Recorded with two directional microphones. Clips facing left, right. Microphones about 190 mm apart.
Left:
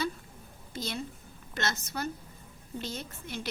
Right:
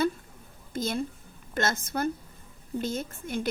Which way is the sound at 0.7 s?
50° right (ahead or behind).